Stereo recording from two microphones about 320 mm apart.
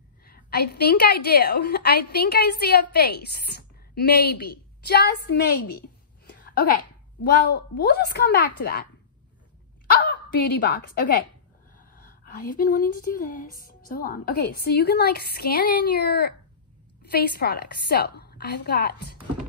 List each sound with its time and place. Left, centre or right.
0.2 s a woman's voice: left
5.7 s a sound: left
7.2 s a woman's voice: left
9.8 s a woman's voice: left